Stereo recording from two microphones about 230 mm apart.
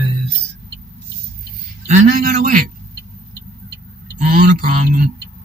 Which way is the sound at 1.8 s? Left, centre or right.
Right.